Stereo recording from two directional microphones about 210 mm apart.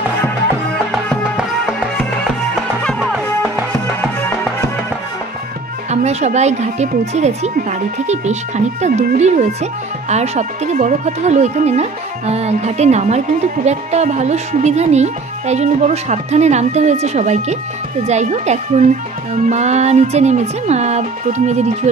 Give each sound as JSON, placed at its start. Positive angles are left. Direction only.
{"t": 2.5, "sound": "music", "side_deg": 5}
{"t": 5.9, "sound": "speech", "side_deg": -30}